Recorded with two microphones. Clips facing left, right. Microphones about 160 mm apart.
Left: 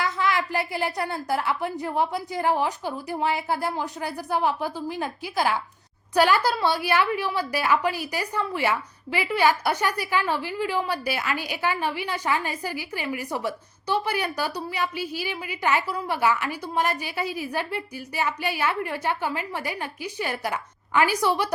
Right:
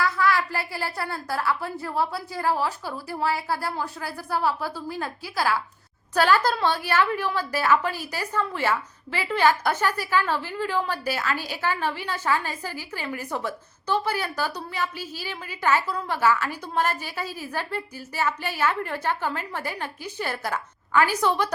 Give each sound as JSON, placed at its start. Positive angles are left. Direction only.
{"t": 0.0, "sound": "a woman's voice", "side_deg": 20}